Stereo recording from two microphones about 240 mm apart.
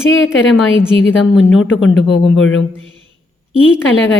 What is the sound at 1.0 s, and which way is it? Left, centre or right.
A woman's voice, left.